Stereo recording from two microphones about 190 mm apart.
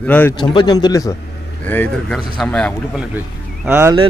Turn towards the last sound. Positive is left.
turn(degrees=-10)  # may be behind; listen again after turning